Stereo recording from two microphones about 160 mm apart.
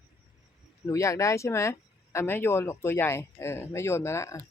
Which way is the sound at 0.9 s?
20° left (ahead or behind).